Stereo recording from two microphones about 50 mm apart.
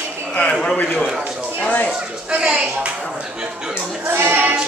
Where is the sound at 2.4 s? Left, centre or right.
Right.